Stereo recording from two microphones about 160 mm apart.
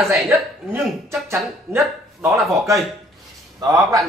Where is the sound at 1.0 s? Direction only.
15° right (ahead or behind).